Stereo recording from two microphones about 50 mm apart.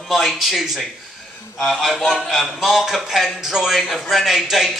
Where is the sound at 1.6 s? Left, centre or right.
Centre.